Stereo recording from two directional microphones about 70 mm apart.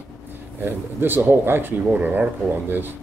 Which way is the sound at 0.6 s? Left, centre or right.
Right.